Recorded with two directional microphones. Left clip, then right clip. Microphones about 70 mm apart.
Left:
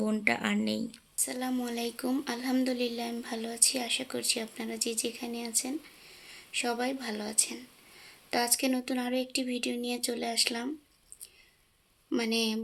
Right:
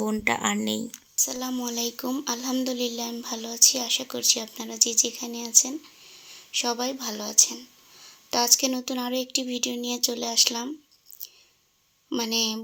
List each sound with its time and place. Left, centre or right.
0.0 s speech: right
1.2 s a woman's voice: right
12.1 s a woman's voice: right